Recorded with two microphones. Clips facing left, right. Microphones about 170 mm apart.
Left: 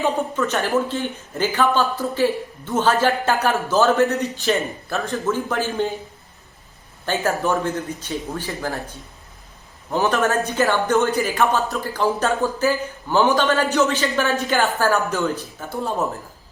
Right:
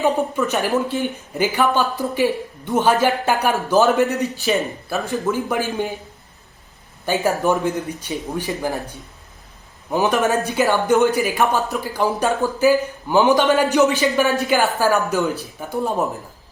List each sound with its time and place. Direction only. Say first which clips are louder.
0.0 s speech: right 2 dB; 15° right (ahead or behind)
7.0 s speech: right 3 dB; 10° right (ahead or behind)